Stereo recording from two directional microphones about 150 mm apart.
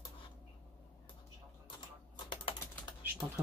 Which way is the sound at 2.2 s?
35° left (ahead or behind).